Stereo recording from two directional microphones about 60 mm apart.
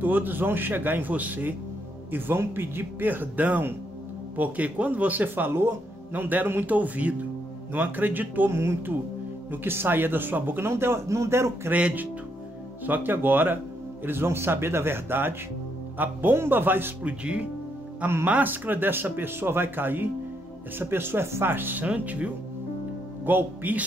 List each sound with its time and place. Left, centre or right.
0.0 s speech: right
8.5 s speech: right
10.7 s speech: right
11.7 s speech: right
17.0 s speech: right
18.0 s speech: right